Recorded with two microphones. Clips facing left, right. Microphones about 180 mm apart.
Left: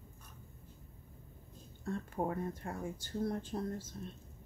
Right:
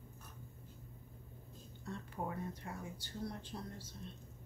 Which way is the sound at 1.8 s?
50° left (ahead or behind).